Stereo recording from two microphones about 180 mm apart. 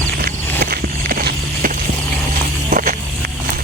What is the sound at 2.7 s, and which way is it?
Vehicle, 50° right (ahead or behind).